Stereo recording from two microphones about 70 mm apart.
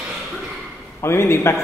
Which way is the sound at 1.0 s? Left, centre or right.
Left.